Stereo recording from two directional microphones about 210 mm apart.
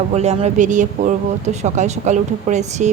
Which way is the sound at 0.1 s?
30° right (ahead or behind).